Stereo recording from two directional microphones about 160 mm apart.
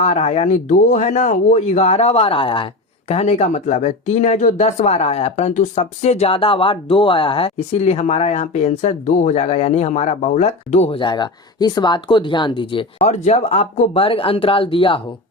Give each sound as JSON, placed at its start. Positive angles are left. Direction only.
{"t": 0.0, "sound": "speech", "side_deg": 40}
{"t": 13.1, "sound": "speech", "side_deg": 45}